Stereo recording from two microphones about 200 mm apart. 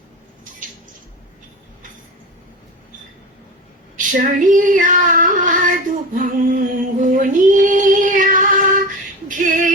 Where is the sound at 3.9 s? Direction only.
40° right (ahead or behind).